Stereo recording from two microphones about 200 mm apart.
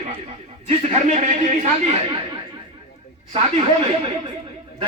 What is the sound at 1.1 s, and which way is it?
A man's voice, 35° right (ahead or behind).